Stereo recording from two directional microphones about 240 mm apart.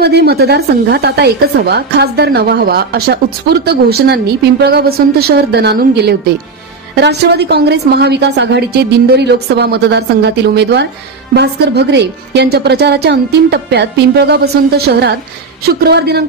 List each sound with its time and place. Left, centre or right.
0.0 s a woman's voice: right